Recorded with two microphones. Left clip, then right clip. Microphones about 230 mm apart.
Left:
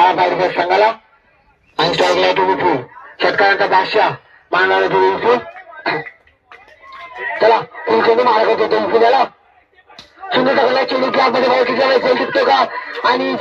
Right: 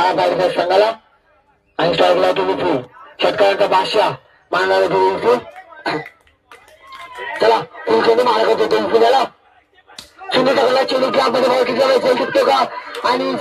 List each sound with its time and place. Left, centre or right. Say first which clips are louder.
0.0 s a man's voice: left 2 dB; right
7.2 s a man's voice: left 2 dB; right
12.6 s a man's voice: left 3 dB; right
13.0 s a man's voice: left 2 dB; right